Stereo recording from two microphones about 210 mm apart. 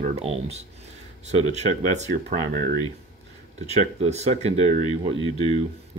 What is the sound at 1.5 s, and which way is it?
Speech, 35° right (ahead or behind).